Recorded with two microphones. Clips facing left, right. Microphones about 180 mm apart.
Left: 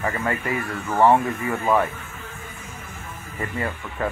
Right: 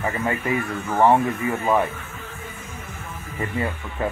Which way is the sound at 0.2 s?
15° right (ahead or behind).